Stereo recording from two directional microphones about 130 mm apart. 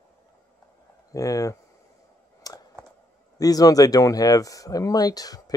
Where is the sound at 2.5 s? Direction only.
25° left (ahead or behind).